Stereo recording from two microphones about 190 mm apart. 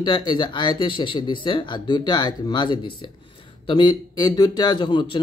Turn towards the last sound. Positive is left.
turn(degrees=25)  # may be behind; listen again after turning